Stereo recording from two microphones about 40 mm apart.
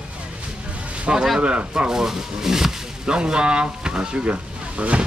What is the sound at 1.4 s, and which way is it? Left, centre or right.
Speech, right.